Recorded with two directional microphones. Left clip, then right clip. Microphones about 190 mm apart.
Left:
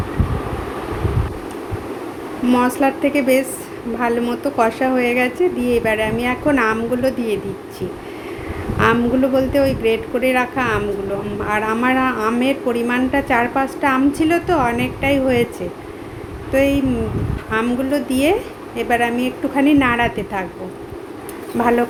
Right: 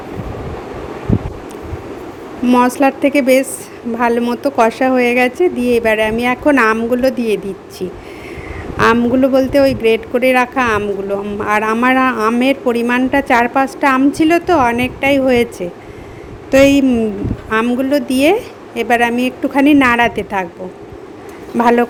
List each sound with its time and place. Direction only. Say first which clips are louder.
2.5 s a woman's voice: right 5 dB; 45° right (ahead or behind)
8.8 s a woman's voice: right 4 dB; 50° right (ahead or behind)
21.6 s a woman's voice: right 5 dB; 50° right (ahead or behind)